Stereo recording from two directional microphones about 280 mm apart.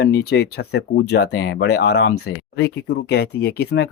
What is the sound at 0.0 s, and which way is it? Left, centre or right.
Speech, left.